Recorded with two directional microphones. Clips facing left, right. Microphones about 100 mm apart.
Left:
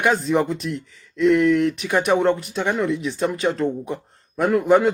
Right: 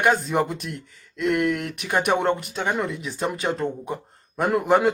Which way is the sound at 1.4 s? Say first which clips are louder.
Left 7 dB; 50° right (ahead or behind).